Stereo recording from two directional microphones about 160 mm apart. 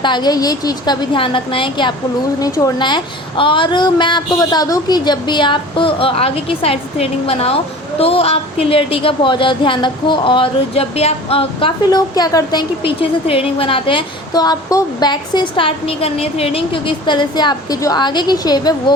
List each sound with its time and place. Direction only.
0.0 s a woman's voice: 30° left (ahead or behind)